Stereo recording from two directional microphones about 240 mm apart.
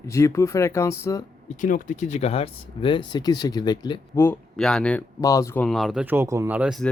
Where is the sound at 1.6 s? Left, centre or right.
Left.